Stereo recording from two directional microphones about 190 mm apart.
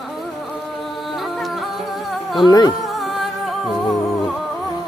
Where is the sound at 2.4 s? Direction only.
20° left (ahead or behind).